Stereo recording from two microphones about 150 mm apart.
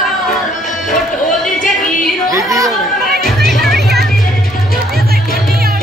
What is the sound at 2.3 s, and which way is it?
Chatter, 20° right (ahead or behind).